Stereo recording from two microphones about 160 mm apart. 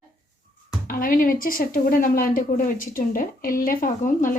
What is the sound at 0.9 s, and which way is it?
A woman's voice, 60° left (ahead or behind).